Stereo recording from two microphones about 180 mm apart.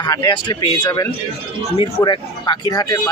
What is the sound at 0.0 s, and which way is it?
A man's voice, 25° left (ahead or behind).